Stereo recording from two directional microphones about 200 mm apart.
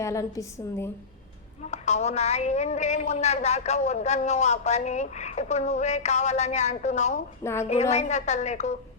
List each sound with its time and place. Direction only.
0.0 s a woman's voice: 15° left (ahead or behind)
1.6 s a woman's voice: 35° left (ahead or behind)